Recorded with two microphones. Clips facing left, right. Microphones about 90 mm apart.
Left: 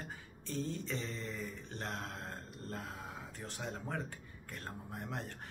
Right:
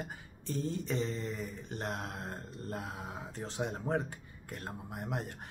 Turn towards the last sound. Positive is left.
turn(degrees=-15)  # may be behind; listen again after turning